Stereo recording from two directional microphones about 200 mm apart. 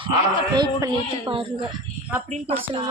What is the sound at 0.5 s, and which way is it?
Speech, 20° right (ahead or behind).